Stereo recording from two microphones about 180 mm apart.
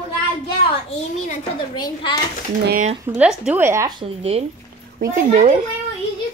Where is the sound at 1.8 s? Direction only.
25° left (ahead or behind).